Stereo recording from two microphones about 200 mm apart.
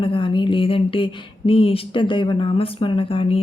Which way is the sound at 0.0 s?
25° left (ahead or behind).